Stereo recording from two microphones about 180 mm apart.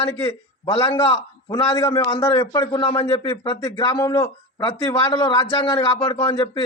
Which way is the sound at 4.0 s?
15° left (ahead or behind).